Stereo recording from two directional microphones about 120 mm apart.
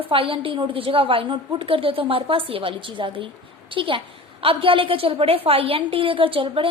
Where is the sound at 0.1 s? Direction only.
50° right (ahead or behind).